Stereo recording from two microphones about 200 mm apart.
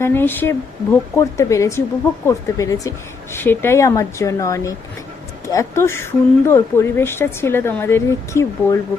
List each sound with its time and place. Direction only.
0.0 s speech: 10° left (ahead or behind)